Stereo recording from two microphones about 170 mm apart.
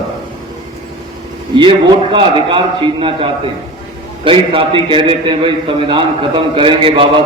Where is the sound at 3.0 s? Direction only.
30° right (ahead or behind).